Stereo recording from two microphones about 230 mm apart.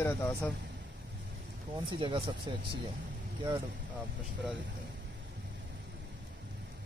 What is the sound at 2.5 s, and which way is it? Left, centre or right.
Speech, centre.